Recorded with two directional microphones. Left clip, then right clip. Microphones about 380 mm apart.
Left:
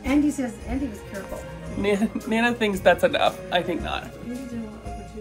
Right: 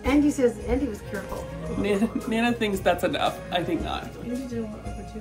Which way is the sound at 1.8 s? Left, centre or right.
Centre.